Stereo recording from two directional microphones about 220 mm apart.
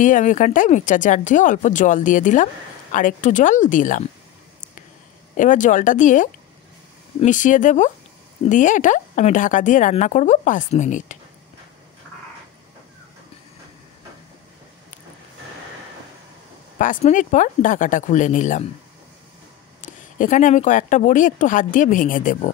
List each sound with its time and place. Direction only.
0.0 s speech: 35° left (ahead or behind)
5.3 s speech: 35° left (ahead or behind)
16.7 s speech: 35° left (ahead or behind)
19.8 s speech: 35° left (ahead or behind)